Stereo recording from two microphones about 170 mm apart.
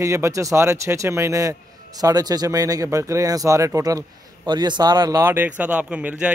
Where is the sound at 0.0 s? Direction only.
20° right (ahead or behind).